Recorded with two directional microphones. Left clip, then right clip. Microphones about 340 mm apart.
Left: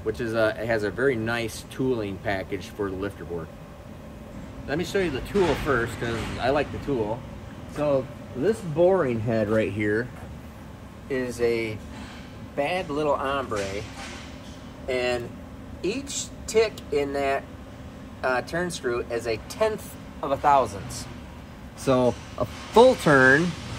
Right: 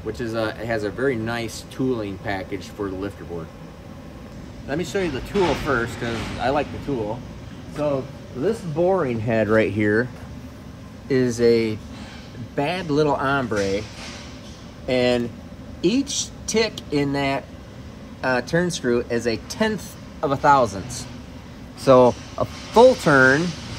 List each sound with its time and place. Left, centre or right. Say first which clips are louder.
0.2 s speech: left 2 dB; centre
4.6 s speech: right 1 dB; centre
7.7 s speech: even; centre
9.5 s speech: right 7 dB; right
11.1 s speech: right 7 dB; right
14.9 s speech: right 6 dB; right
21.8 s speech: right 8 dB; centre
22.4 s speech: right 3 dB; centre